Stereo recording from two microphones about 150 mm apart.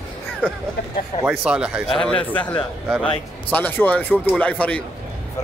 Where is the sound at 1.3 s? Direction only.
5° right (ahead or behind).